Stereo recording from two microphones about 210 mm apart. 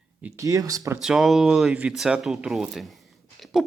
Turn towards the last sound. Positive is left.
turn(degrees=0)  # may be behind; listen again after turning